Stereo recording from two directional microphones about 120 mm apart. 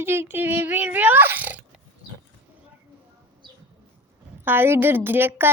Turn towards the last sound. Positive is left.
turn(degrees=-15)  # may be behind; listen again after turning